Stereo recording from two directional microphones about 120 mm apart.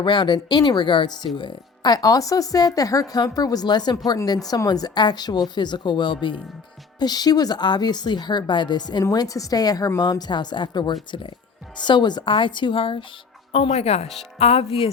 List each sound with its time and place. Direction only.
0.0 s a woman's voice: 40° left (ahead or behind)
13.5 s speech: 60° left (ahead or behind)